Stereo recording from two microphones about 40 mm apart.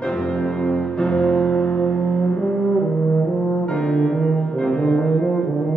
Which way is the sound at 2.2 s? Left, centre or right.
Left.